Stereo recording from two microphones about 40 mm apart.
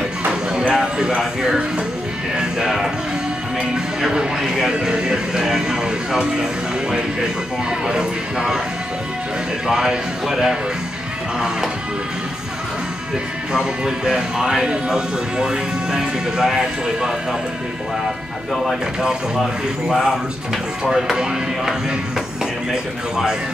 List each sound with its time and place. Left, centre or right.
0.3 s music: centre
3.7 s speech: centre
7.8 s speech: centre
9.7 s speech: centre
13.5 s speech: centre
19.3 s speech: centre